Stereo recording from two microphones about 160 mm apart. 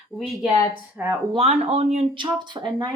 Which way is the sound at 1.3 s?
40° right (ahead or behind).